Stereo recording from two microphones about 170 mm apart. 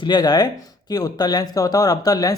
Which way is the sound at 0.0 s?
25° left (ahead or behind).